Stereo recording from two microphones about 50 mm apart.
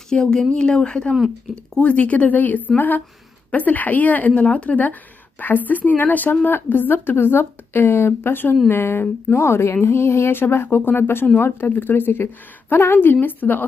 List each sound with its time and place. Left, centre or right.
0.1 s a woman's voice: centre; by 9.0 s left
9.3 s a woman's voice: left
11.7 s a woman's voice: left
13.1 s a woman's voice: left